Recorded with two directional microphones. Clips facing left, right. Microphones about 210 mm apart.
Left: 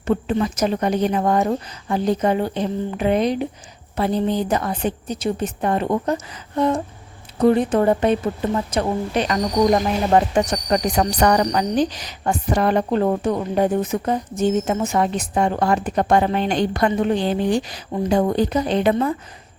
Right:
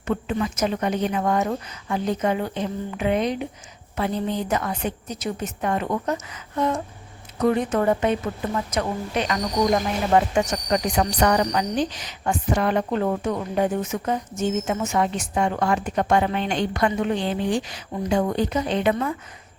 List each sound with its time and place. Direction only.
0.1 s a woman's voice: 35° left (ahead or behind)